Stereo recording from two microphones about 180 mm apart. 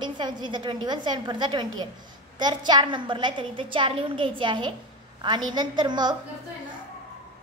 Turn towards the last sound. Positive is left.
turn(degrees=-25)  # may be behind; listen again after turning